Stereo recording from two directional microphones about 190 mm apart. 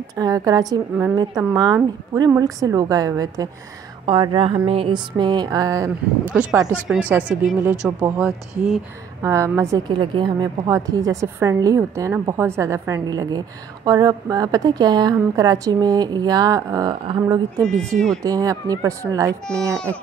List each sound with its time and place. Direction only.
0.1 s a woman's voice: 20° right (ahead or behind)
2.1 s a woman's voice: 20° right (ahead or behind)
6.2 s a woman's voice: 5° right (ahead or behind)
17.6 s speech: 5° left (ahead or behind)
18.2 s a woman's voice: 20° right (ahead or behind)